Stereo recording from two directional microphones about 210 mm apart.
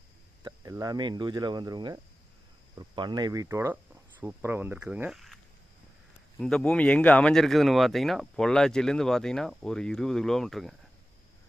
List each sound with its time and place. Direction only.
0.4 s speech: 15° right (ahead or behind); by 5.4 s centre (ahead or behind)
6.4 s speech: 5° left (ahead or behind)